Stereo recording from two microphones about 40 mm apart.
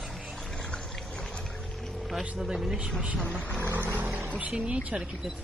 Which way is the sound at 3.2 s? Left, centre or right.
Left.